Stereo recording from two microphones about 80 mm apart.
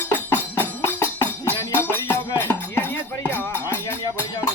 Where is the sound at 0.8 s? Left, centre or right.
Left.